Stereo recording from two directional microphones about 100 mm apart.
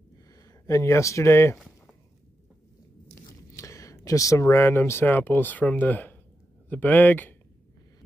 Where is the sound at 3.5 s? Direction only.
30° left (ahead or behind).